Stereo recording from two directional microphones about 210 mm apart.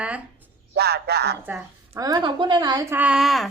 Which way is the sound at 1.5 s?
10° right (ahead or behind).